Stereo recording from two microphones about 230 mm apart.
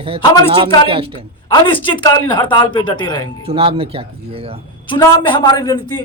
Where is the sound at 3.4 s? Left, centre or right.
Right.